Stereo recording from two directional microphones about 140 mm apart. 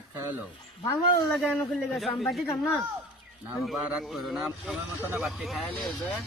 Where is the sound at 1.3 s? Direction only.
5° left (ahead or behind).